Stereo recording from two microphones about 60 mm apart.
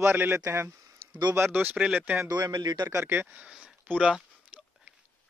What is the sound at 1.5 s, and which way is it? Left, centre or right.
Speech, right.